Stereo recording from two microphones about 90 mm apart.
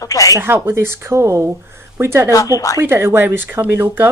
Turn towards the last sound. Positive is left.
turn(degrees=-25)  # may be behind; listen again after turning